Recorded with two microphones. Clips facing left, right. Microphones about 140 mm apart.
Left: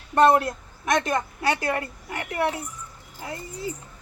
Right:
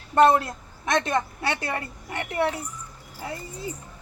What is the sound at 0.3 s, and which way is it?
A woman's voice, 25° right (ahead or behind).